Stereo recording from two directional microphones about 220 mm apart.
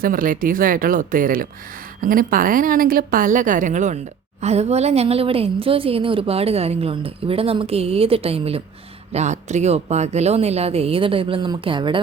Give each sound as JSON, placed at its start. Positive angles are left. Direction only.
{"t": 0.0, "sound": "a woman's voice", "side_deg": -40}